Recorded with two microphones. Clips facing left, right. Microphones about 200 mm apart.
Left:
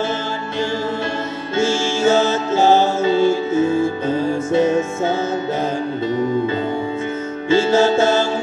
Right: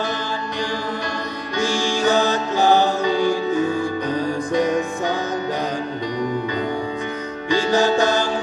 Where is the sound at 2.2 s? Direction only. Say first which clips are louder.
Left 3 dB; 15° right (ahead or behind).